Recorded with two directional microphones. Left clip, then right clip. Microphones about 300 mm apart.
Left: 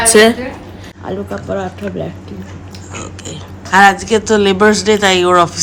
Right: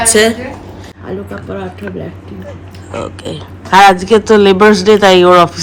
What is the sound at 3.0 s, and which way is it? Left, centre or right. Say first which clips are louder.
A man's voice: right 8 dB; centre.